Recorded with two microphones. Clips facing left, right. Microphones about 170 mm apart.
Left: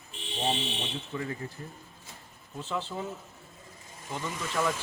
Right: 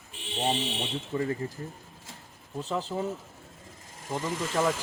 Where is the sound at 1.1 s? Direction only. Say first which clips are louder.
Right 6 dB; 35° right (ahead or behind).